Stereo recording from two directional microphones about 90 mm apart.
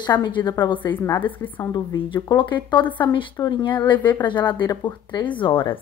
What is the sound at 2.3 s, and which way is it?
A woman's voice, 60° left (ahead or behind).